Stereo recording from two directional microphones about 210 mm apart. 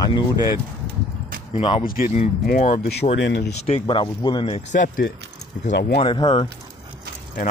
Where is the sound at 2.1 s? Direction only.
35° left (ahead or behind).